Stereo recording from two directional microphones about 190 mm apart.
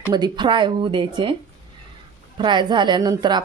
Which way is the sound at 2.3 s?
25° right (ahead or behind).